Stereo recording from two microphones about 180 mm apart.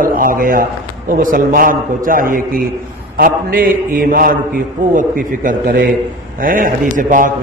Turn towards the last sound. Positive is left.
turn(degrees=-50)  # may be behind; listen again after turning